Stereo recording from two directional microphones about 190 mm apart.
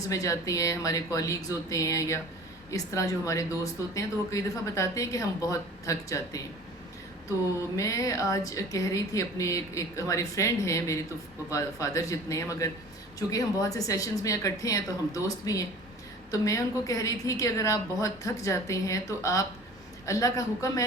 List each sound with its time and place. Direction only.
0.1 s speech: 15° left (ahead or behind)
7.8 s speech: 15° left (ahead or behind)